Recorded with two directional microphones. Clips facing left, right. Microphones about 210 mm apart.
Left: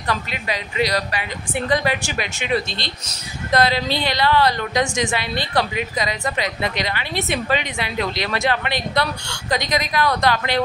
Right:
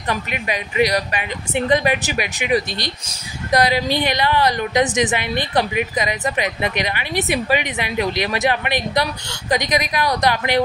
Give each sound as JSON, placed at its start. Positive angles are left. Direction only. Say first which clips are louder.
{"t": 0.0, "sound": "speech", "louder": "right 1 dB", "side_deg": -15}